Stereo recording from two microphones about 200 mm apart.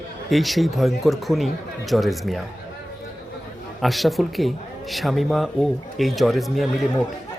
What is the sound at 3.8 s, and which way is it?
Speech, centre (ahead or behind).